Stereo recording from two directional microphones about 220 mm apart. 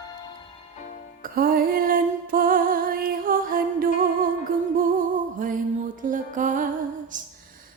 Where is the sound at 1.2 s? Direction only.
40° right (ahead or behind).